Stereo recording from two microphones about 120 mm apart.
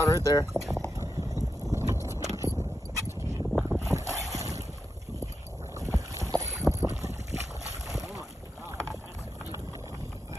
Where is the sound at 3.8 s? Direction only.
25° right (ahead or behind).